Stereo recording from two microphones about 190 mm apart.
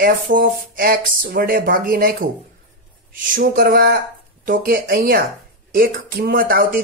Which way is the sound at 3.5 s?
50° right (ahead or behind).